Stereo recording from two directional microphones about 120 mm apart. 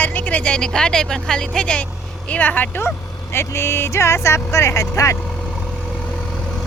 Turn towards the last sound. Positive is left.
turn(degrees=25)  # may be behind; listen again after turning